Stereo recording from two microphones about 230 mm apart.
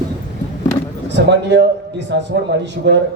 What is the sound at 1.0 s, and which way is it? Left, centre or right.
A man's voice, right.